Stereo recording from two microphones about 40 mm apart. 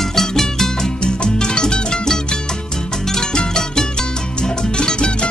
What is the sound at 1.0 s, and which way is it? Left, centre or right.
Music, centre.